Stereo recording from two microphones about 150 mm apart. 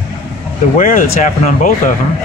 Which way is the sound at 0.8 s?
60° left (ahead or behind).